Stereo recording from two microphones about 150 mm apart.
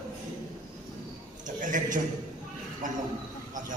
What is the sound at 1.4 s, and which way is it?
Speech, 60° right (ahead or behind).